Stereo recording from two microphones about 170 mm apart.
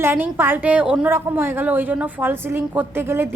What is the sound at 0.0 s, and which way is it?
A woman's voice, 10° right (ahead or behind).